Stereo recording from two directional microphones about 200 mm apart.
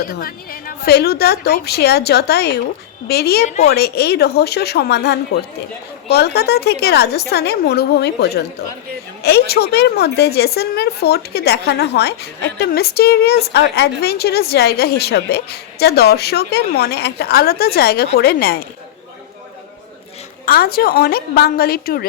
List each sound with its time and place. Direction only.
0.0 s a woman's voice: 50° left (ahead or behind)
3.4 s a woman's voice: 35° left (ahead or behind)
3.7 s a woman's voice: 55° left (ahead or behind)
20.4 s a woman's voice: 50° left (ahead or behind)